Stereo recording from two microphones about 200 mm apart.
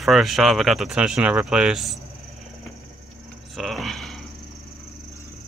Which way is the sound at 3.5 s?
Centre (ahead or behind).